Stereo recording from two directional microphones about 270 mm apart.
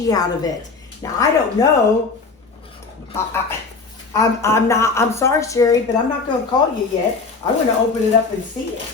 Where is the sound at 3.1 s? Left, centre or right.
Centre.